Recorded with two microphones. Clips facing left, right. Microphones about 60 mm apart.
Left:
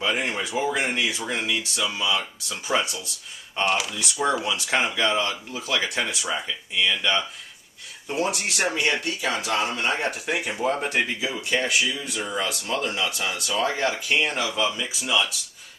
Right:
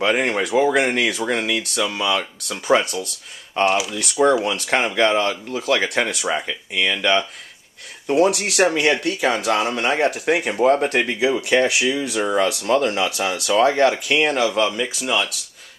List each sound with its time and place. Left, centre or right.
0.0 s speech: right
4.5 s speech: right